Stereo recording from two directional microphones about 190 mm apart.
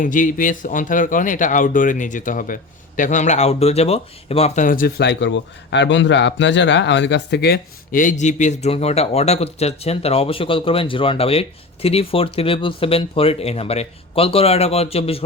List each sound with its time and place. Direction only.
0.0 s speech: 45° left (ahead or behind)